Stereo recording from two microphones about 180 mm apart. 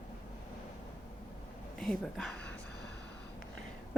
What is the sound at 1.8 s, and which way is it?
Speech, centre (ahead or behind).